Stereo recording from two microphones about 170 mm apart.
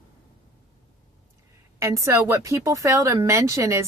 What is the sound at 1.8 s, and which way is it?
Speech, 15° right (ahead or behind).